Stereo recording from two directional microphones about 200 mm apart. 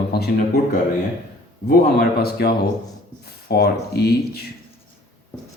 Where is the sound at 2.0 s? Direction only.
50° left (ahead or behind).